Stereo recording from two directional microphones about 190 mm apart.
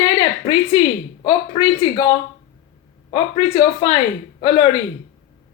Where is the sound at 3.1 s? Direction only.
30° left (ahead or behind).